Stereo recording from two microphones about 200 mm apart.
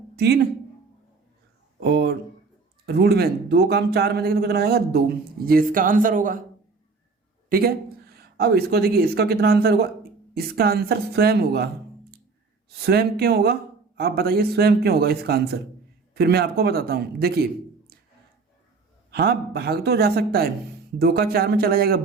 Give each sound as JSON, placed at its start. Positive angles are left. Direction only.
{"t": 0.2, "sound": "speech", "side_deg": -55}
{"t": 1.8, "sound": "speech", "side_deg": -55}
{"t": 8.1, "sound": "speech", "side_deg": -50}
{"t": 12.8, "sound": "speech", "side_deg": -50}
{"t": 19.1, "sound": "speech", "side_deg": -55}